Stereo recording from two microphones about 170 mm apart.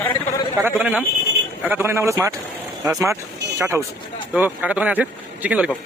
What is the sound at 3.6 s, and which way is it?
A man's voice, 15° right (ahead or behind).